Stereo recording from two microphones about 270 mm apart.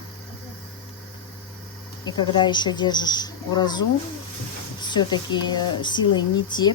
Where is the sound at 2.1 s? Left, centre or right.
Centre.